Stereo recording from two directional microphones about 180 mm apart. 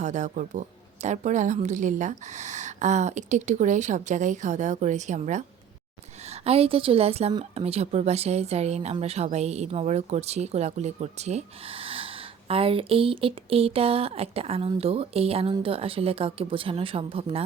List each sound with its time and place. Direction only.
0.0 s a woman's voice: 40° right (ahead or behind)